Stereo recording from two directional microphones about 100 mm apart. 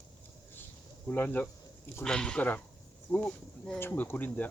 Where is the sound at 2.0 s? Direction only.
5° left (ahead or behind).